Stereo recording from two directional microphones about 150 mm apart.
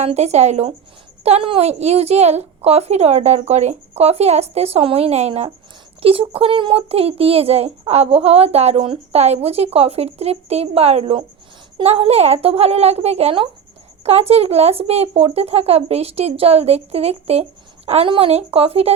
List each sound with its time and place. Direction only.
0.0 s speech: 45° right (ahead or behind)